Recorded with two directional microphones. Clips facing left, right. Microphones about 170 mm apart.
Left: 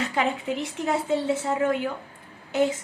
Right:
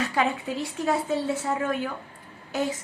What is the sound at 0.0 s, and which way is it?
Speech, 20° left (ahead or behind).